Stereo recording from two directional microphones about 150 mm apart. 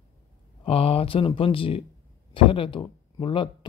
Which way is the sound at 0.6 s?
40° left (ahead or behind).